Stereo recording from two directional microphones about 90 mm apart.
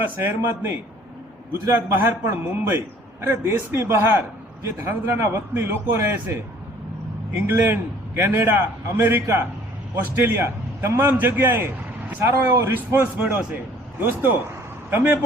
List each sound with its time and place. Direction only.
0.0 s a man's voice: 25° right (ahead or behind)
7.4 s a man's voice: 25° right (ahead or behind)